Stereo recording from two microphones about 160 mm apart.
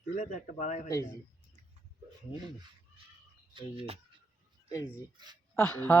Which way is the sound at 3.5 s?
30° right (ahead or behind).